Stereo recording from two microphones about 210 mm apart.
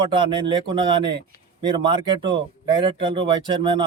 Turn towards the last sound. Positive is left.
turn(degrees=-25)  # may be behind; listen again after turning